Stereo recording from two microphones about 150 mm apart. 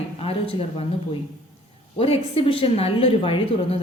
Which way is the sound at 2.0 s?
40° left (ahead or behind).